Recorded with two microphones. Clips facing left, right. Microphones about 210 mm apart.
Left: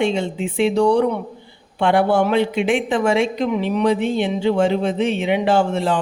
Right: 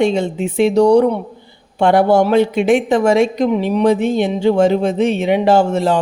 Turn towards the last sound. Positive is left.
turn(degrees=-40)  # may be behind; listen again after turning